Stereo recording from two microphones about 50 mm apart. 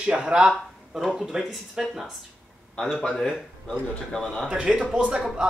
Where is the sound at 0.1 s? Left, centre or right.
Centre.